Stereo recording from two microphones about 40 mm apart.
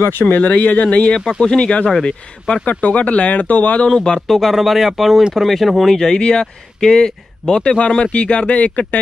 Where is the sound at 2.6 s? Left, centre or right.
Left.